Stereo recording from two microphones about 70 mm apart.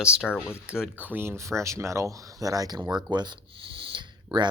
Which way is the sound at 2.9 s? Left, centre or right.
Right.